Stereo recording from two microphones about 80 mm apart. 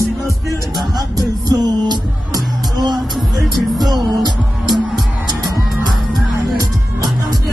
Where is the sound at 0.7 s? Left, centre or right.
Right.